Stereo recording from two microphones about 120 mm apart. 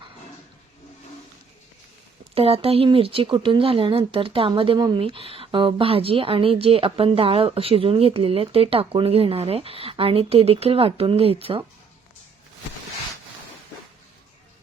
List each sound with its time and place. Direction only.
2.3 s speech: 55° right (ahead or behind)